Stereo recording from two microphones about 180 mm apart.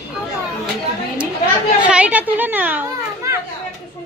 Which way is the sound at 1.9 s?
10° right (ahead or behind).